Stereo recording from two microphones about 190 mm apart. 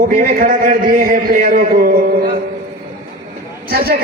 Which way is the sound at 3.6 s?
55° right (ahead or behind).